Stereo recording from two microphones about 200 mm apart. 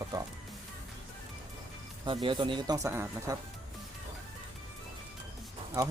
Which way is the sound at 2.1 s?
25° right (ahead or behind).